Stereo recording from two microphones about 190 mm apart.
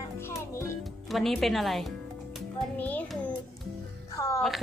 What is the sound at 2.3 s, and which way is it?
Music, 5° left (ahead or behind).